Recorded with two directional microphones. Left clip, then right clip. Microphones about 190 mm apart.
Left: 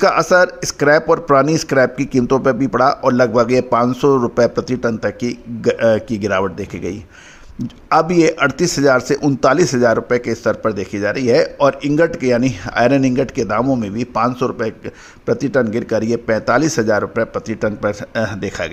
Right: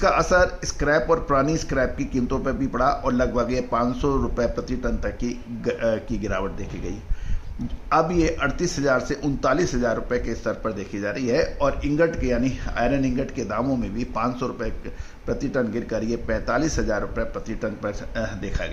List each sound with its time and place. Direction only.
0.0 s speech: 40° left (ahead or behind)